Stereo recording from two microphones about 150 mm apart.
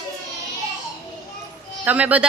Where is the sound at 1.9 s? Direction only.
10° right (ahead or behind).